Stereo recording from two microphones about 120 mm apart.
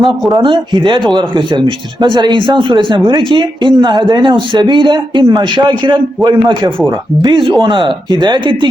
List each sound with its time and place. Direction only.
0.3 s speech: 40° right (ahead or behind)